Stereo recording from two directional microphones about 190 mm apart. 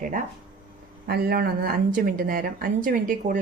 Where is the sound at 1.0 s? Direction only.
50° right (ahead or behind).